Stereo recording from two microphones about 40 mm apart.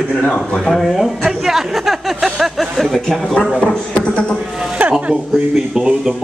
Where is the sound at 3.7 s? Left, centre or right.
Left.